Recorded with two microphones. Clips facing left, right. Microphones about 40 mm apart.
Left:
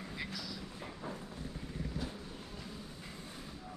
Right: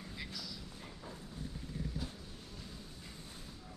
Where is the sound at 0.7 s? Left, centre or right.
Left.